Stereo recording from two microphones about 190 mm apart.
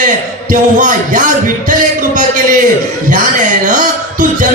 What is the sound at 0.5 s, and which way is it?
A man's voice, 45° right (ahead or behind).